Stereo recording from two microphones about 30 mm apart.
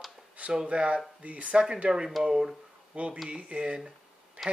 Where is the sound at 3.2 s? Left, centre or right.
Right.